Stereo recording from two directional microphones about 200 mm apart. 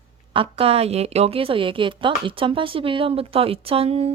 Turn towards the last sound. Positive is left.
turn(degrees=-30)  # may be behind; listen again after turning